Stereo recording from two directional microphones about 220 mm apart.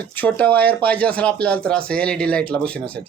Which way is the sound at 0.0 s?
5° left (ahead or behind).